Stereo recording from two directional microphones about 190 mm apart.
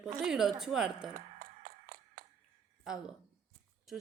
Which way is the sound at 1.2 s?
45° right (ahead or behind).